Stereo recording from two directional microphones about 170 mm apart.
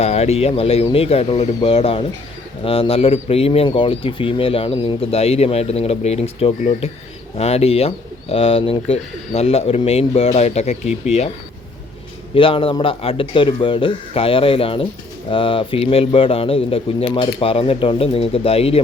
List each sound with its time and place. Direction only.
0.0 s speech: 40° left (ahead or behind)
12.3 s speech: 30° left (ahead or behind)